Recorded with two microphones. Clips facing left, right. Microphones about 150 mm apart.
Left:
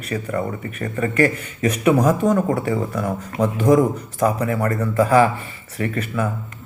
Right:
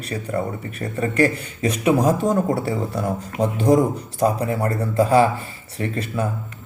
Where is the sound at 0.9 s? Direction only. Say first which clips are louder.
Even; 30° right (ahead or behind).